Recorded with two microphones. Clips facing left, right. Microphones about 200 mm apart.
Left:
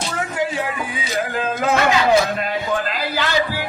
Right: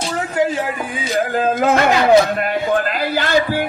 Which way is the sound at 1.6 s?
50° right (ahead or behind).